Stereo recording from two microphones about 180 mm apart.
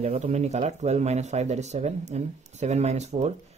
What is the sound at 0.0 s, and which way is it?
Speech, 40° right (ahead or behind).